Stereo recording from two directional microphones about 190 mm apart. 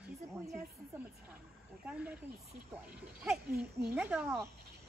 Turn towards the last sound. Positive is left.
turn(degrees=-10)  # may be behind; listen again after turning